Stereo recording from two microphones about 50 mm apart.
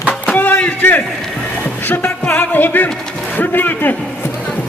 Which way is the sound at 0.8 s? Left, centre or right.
Left.